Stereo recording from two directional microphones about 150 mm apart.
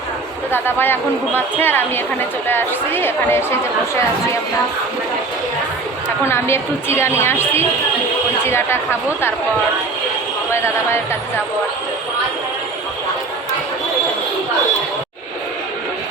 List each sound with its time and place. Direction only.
0.5 s speech: 15° left (ahead or behind)
6.2 s speech: 15° left (ahead or behind)